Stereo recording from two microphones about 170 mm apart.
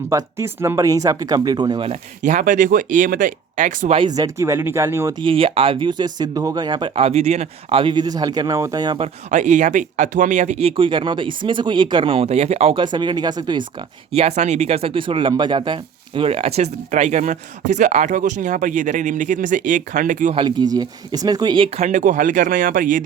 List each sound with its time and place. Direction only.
0.1 s speech: 15° right (ahead or behind)
1.9 s speech: 45° right (ahead or behind)
3.9 s speech: 25° right (ahead or behind)
5.2 s speech: 30° right (ahead or behind)
9.3 s speech: 45° right (ahead or behind); by 13.7 s 25° right (ahead or behind)
14.1 s speech: 40° right (ahead or behind)
20.3 s speech: 25° right (ahead or behind)
21.8 s speech: 45° right (ahead or behind)